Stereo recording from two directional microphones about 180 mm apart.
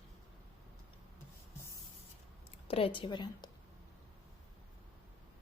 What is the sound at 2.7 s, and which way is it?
Speech, 30° left (ahead or behind).